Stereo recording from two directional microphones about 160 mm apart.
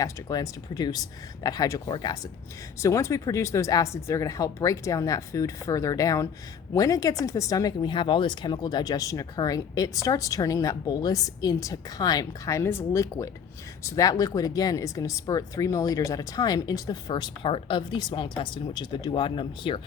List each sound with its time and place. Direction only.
0.0 s speech: 25° left (ahead or behind)